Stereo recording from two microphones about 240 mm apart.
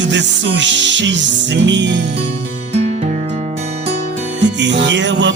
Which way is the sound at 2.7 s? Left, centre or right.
Right.